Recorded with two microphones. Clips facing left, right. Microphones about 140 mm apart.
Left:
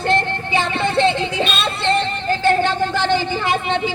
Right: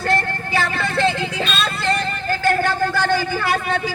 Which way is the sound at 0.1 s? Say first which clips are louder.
Left 2 dB; 25° left (ahead or behind).